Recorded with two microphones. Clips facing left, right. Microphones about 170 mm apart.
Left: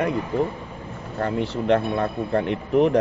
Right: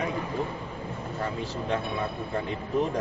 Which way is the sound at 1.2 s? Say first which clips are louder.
Left 9 dB; 65° left (ahead or behind).